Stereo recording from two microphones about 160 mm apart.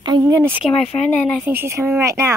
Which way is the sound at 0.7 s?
40° left (ahead or behind).